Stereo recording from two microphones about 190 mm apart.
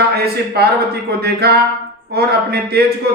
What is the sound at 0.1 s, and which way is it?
A man's voice, 55° right (ahead or behind).